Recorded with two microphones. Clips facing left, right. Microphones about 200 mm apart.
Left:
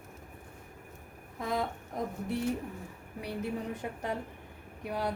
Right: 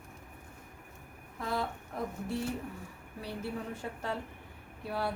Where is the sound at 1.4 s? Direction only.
15° left (ahead or behind).